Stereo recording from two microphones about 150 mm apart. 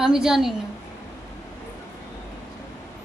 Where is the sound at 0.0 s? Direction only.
5° right (ahead or behind).